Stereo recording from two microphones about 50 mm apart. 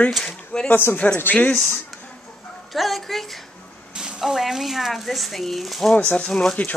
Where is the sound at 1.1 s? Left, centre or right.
Left.